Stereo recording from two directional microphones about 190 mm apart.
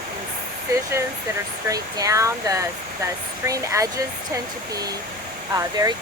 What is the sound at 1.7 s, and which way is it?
Speech, 20° right (ahead or behind).